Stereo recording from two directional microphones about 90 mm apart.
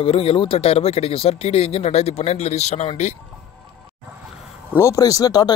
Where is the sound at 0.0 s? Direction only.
90° left.